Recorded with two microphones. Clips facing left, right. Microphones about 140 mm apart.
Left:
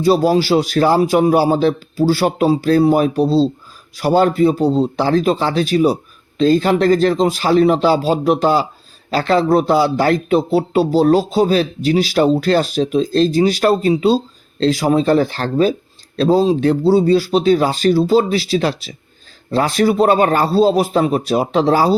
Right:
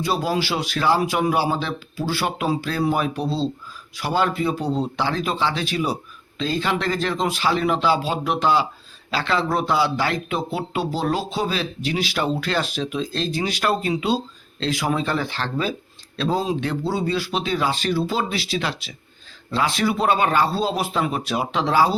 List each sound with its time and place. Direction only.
0.0 s speech: 35° left (ahead or behind)